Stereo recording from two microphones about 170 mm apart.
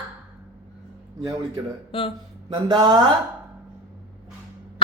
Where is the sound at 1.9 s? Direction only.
30° left (ahead or behind).